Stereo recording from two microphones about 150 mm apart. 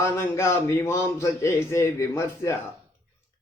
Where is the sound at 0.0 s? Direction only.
20° left (ahead or behind).